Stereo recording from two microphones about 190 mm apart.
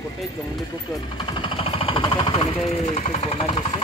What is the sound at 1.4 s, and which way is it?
Vehicle, 30° left (ahead or behind).